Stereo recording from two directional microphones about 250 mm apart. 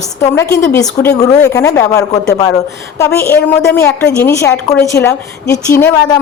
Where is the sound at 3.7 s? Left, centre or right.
Centre.